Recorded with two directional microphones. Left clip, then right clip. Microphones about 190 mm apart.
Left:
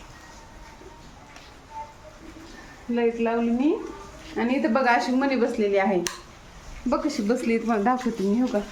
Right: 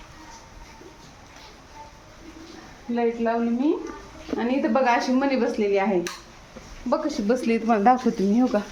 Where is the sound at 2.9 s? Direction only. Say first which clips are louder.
Even; 5° left (ahead or behind).